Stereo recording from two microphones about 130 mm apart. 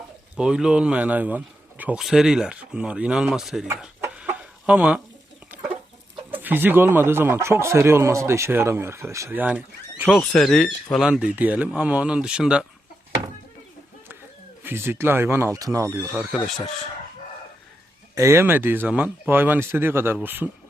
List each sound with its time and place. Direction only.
0.3 s a man's voice: 5° right (ahead or behind)
3.8 s chicken: 10° right (ahead or behind)
6.3 s a man's voice: 15° right (ahead or behind)
14.6 s speech: 20° right (ahead or behind)
18.1 s a man's voice: 20° right (ahead or behind)